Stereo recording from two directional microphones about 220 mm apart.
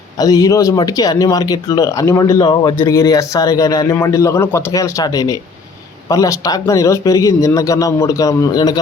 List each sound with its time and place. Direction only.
0.2 s speech: 15° left (ahead or behind)